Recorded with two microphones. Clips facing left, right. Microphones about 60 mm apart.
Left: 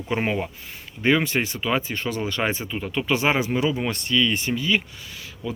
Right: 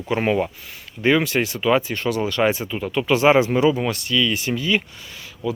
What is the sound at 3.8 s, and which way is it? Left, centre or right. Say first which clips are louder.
Speech: right 1 dB; centre.